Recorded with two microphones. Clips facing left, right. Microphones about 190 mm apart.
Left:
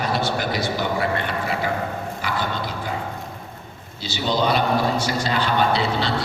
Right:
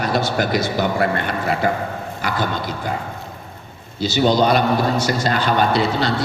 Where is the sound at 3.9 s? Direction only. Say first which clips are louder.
Right 7 dB; 45° right (ahead or behind).